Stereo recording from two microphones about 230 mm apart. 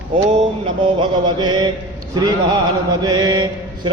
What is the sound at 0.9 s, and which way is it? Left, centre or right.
Mantra, centre.